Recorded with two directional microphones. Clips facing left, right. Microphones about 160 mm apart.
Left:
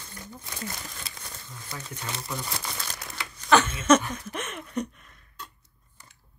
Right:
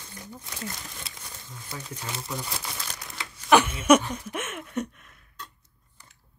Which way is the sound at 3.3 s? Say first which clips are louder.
Right 2 dB; 10° right (ahead or behind).